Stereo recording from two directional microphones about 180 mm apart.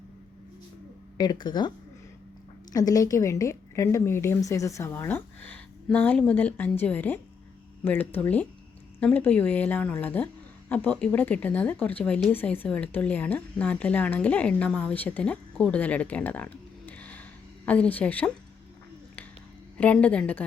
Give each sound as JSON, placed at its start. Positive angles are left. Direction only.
{"t": 1.2, "sound": "speech", "side_deg": 25}
{"t": 2.7, "sound": "speech", "side_deg": 20}
{"t": 19.8, "sound": "speech", "side_deg": 5}